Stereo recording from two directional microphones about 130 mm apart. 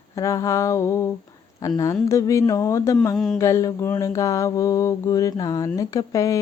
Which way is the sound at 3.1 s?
Centre (ahead or behind).